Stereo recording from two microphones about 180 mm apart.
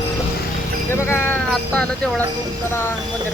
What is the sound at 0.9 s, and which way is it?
Speech, 15° left (ahead or behind).